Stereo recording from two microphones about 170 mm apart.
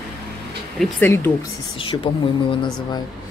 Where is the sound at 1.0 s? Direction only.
15° left (ahead or behind).